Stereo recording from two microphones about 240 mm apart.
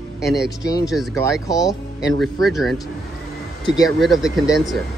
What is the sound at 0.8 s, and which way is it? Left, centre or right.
Speech, centre.